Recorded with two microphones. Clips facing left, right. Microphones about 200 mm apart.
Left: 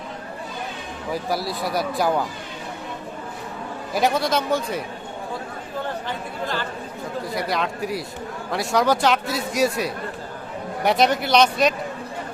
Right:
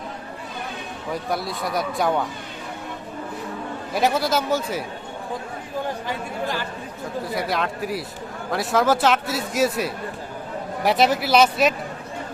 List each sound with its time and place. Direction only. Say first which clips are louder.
1.1 s a man's voice: left 1 dB; 5° left (ahead or behind)
3.9 s a man's voice: even; centre (ahead or behind)
6.1 s speech: right 1 dB; 15° right (ahead or behind)
7.3 s a man's voice: even; centre (ahead or behind)